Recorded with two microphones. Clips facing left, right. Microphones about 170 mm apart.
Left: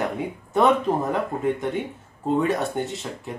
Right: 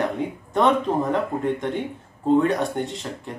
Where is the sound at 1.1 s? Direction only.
5° left (ahead or behind).